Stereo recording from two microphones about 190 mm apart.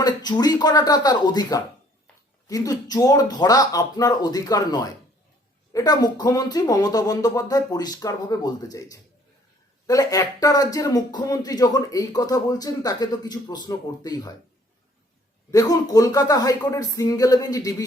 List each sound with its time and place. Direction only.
0.0 s speech: 20° left (ahead or behind)
15.5 s speech: 20° left (ahead or behind)